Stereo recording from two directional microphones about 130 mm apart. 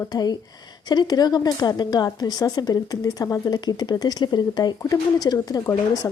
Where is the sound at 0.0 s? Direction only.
30° left (ahead or behind).